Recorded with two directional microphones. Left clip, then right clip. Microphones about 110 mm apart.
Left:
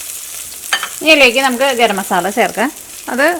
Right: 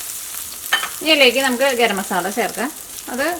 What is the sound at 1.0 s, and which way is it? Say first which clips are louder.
Speech: left 5 dB; 30° left (ahead or behind).